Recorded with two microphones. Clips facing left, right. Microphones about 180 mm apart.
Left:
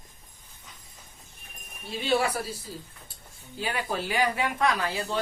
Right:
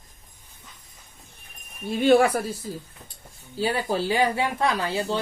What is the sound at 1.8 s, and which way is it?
Speech, 50° right (ahead or behind).